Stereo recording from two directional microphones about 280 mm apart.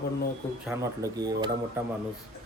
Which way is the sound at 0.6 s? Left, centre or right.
Centre.